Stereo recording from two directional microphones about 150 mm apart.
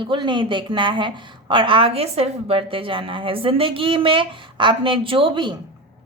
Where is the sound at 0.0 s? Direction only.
35° right (ahead or behind).